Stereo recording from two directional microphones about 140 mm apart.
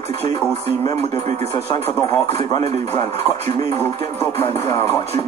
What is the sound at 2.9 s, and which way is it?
Music, 15° left (ahead or behind).